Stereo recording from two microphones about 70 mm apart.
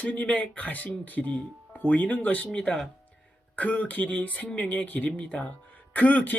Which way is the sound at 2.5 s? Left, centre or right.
Centre.